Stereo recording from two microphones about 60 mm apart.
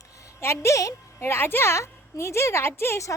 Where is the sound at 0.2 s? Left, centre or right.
Left.